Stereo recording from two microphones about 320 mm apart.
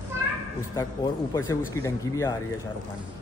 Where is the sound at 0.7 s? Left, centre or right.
Centre.